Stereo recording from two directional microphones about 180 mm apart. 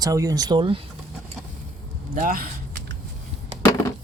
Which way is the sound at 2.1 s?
50° right (ahead or behind).